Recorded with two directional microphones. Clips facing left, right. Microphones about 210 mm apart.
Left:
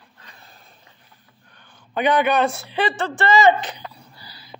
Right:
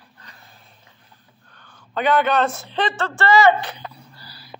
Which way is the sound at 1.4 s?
15° left (ahead or behind).